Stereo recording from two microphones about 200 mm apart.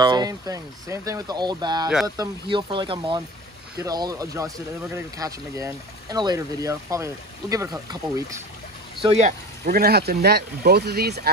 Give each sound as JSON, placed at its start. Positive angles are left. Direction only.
{"t": 0.0, "sound": "speech", "side_deg": -20}
{"t": 9.0, "sound": "speech", "side_deg": -35}
{"t": 9.7, "sound": "speech", "side_deg": -50}